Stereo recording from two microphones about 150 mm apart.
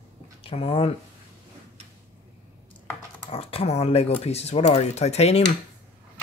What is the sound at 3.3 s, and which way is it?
Speech, 40° left (ahead or behind).